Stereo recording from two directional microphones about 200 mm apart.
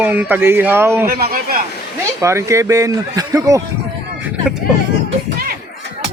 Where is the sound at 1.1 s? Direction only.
50° right (ahead or behind).